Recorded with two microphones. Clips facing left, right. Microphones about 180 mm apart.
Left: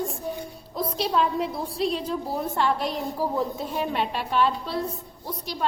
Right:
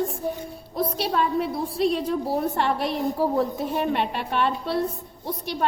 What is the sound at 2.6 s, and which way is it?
A woman's voice, 60° right (ahead or behind).